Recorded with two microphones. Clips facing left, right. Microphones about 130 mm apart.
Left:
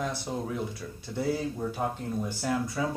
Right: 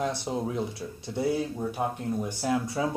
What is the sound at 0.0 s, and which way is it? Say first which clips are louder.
Speech: right 3 dB; 20° right (ahead or behind).